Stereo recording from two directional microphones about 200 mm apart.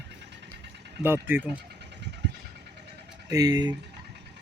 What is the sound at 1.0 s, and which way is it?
Speech, 10° right (ahead or behind).